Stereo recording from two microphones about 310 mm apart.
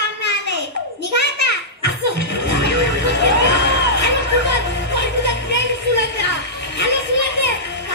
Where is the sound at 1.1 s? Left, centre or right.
Left.